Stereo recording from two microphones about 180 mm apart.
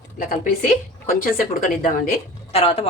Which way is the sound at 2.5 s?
30° left (ahead or behind).